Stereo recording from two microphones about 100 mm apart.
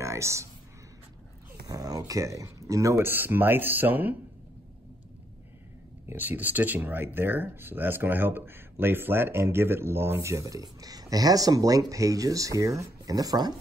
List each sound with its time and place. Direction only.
0.0 s a sound: 30° right (ahead or behind)
1.7 s speech: 40° right (ahead or behind); by 4.2 s 20° right (ahead or behind)
6.0 s speech: 20° right (ahead or behind); by 13.6 s 40° right (ahead or behind)